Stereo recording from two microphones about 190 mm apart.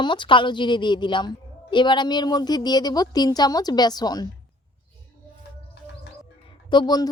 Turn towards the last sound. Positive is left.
turn(degrees=20)  # may be behind; listen again after turning